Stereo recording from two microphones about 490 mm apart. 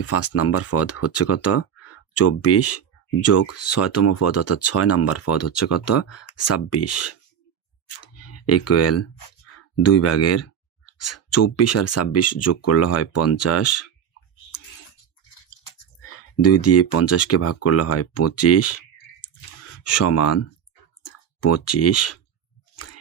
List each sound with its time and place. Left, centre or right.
0.0 s speech: left
8.0 s a sound: left
9.8 s speech: left
16.0 s speech: left
21.0 s clicking: left